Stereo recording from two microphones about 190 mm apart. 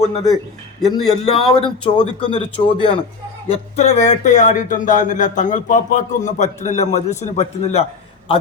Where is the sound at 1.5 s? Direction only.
25° left (ahead or behind).